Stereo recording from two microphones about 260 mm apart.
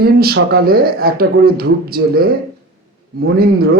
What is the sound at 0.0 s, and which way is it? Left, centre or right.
Speech, right.